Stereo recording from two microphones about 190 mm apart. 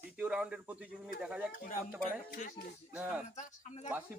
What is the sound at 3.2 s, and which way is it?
Speech, 35° left (ahead or behind).